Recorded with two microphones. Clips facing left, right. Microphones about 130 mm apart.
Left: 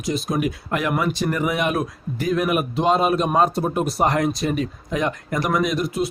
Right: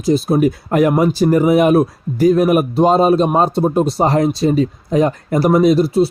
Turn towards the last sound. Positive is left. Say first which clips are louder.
# right 10 dB
turn(degrees=-30)  # may be behind; listen again after turning